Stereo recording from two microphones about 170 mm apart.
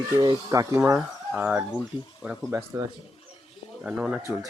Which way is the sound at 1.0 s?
5° right (ahead or behind).